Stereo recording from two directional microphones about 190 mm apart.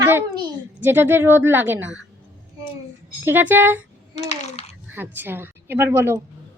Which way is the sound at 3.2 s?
10° right (ahead or behind).